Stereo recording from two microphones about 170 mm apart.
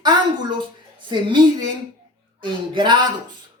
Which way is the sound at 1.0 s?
30° right (ahead or behind).